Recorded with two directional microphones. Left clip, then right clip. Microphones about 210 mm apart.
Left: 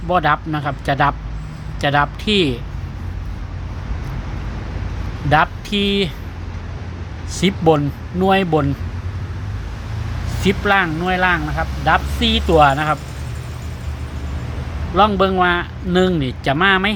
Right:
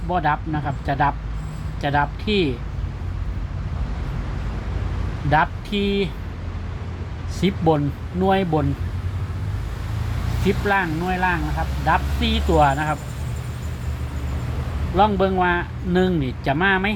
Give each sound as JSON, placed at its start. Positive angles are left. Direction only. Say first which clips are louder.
{"t": 0.1, "sound": "speech", "louder": "left 5 dB", "side_deg": 30}
{"t": 5.3, "sound": "speech", "louder": "left 4 dB", "side_deg": 25}
{"t": 7.3, "sound": "speech", "louder": "left 5 dB", "side_deg": 25}
{"t": 10.4, "sound": "speech", "louder": "left 5 dB", "side_deg": 30}
{"t": 11.9, "sound": "speech", "louder": "left 5 dB", "side_deg": 25}
{"t": 14.9, "sound": "speech", "louder": "left 4 dB", "side_deg": 20}